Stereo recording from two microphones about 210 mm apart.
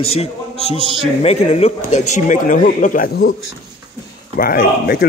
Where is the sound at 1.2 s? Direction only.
30° left (ahead or behind).